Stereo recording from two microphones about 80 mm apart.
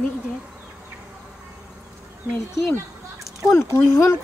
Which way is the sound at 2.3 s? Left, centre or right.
Left.